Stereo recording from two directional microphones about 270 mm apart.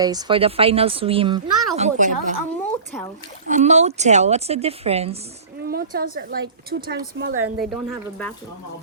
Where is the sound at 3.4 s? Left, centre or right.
Right.